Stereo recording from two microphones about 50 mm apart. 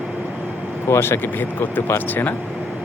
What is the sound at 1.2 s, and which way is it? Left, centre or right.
Speech, left.